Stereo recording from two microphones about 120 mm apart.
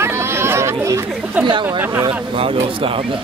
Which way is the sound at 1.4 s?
10° right (ahead or behind).